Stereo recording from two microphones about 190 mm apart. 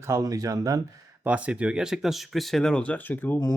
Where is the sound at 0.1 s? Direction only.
15° right (ahead or behind).